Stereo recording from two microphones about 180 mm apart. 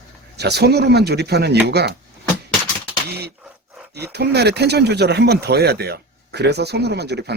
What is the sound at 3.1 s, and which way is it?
Speech, 65° right (ahead or behind).